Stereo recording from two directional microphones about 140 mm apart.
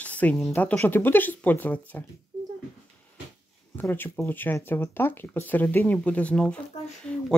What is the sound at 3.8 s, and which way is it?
A woman's voice, 15° left (ahead or behind).